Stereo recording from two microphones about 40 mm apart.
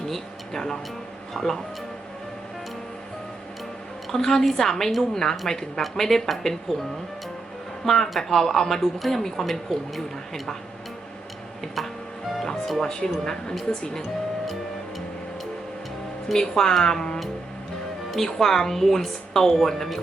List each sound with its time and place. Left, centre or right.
1.3 s music: centre
4.1 s speech: centre
7.9 s speech: centre
11.6 s music: centre
12.8 s speech: centre
13.6 s speech: centre
14.4 s music: centre
16.3 s speech: centre
18.1 s speech: centre